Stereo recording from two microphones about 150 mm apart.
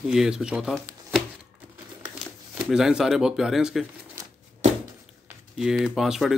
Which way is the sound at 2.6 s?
5° right (ahead or behind).